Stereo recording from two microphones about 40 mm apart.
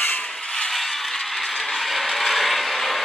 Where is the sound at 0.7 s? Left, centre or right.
Centre.